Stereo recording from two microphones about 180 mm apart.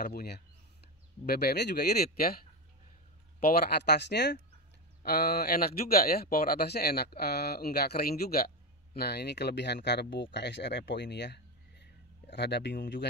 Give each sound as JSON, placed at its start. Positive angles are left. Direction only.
{"t": 0.0, "sound": "speech", "side_deg": 60}
{"t": 3.3, "sound": "speech", "side_deg": 60}